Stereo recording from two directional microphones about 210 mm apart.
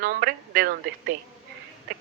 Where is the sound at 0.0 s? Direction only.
45° right (ahead or behind).